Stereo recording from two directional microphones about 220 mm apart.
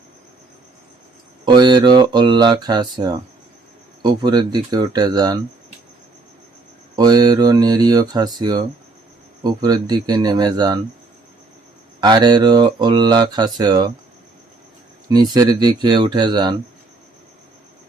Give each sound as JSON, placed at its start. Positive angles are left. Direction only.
{"t": 1.5, "sound": "speech", "side_deg": -20}
{"t": 6.9, "sound": "speech", "side_deg": -15}
{"t": 11.9, "sound": "speech", "side_deg": -20}
{"t": 15.1, "sound": "speech", "side_deg": -20}